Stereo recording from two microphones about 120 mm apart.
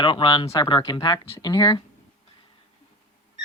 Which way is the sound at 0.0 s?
40° left (ahead or behind).